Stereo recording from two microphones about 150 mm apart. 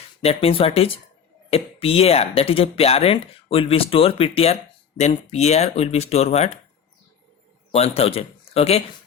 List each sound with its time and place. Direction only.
0.2 s speech: 40° left (ahead or behind)
7.7 s a man's voice: 40° left (ahead or behind)